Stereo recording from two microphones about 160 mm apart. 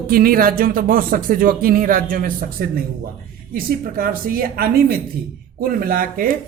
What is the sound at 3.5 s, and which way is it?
A man's voice, 65° right (ahead or behind).